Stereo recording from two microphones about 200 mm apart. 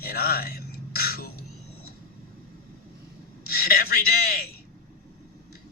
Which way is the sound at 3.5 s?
50° left (ahead or behind).